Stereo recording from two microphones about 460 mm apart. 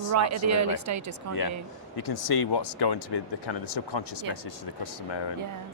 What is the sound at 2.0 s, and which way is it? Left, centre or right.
Speech, left.